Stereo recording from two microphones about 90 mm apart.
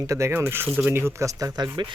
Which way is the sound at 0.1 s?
30° right (ahead or behind).